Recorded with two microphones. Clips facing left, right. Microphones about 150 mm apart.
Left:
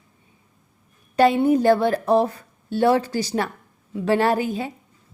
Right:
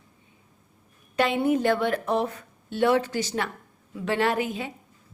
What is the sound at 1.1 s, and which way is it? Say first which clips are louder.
A woman's voice: left 6 dB; 40° left (ahead or behind).